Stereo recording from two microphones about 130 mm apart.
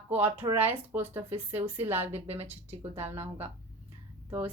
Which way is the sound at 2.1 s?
55° right (ahead or behind).